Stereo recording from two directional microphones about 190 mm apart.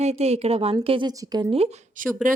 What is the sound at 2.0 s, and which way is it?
Speech, 45° right (ahead or behind).